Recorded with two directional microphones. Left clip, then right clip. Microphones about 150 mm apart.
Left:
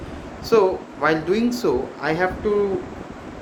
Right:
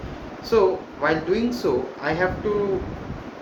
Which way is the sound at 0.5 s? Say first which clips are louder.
Left 2 dB; 90° left.